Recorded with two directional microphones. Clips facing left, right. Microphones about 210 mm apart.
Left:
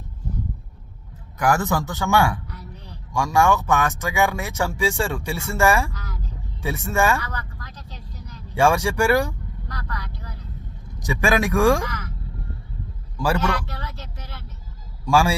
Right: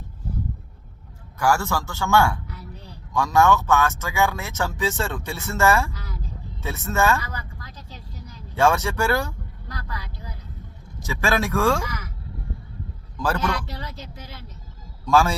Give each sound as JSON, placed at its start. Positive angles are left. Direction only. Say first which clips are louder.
{"t": 1.4, "sound": "speech", "louder": "left 1 dB", "side_deg": 20}
{"t": 7.3, "sound": "vehicle", "louder": "left 2 dB", "side_deg": -10}
{"t": 8.5, "sound": "speech", "louder": "left 2 dB", "side_deg": 15}
{"t": 9.6, "sound": "vehicle", "louder": "left 1 dB", "side_deg": -10}
{"t": 11.0, "sound": "speech", "louder": "left 3 dB", "side_deg": 15}
{"t": 11.9, "sound": "speech", "louder": "left 1 dB", "side_deg": -10}
{"t": 13.1, "sound": "a man's voice", "louder": "left 2 dB", "side_deg": 10}
{"t": 13.7, "sound": "a sound", "louder": "even", "side_deg": -15}
{"t": 15.0, "sound": "speech", "louder": "even", "side_deg": 10}